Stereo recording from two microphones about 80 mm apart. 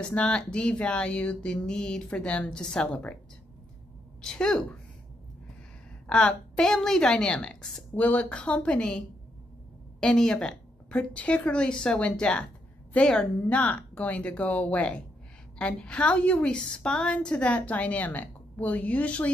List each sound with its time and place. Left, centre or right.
0.1 s a woman's voice: centre
4.2 s a woman's voice: centre
6.0 s a woman's voice: centre
7.9 s a woman's voice: centre